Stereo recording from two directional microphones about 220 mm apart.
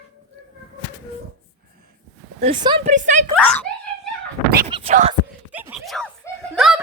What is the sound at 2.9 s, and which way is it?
Speech, 35° right (ahead or behind).